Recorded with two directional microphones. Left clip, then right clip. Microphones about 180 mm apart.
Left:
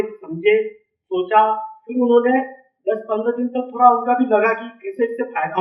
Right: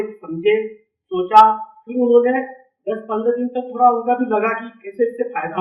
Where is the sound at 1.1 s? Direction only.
35° left (ahead or behind).